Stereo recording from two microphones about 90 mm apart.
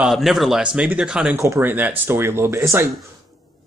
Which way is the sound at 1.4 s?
25° right (ahead or behind).